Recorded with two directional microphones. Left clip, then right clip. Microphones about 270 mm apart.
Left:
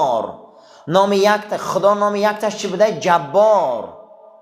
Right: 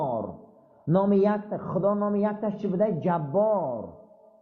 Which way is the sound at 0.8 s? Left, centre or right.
Centre.